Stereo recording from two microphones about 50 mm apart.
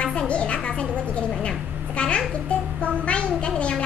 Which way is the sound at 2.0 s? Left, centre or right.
Left.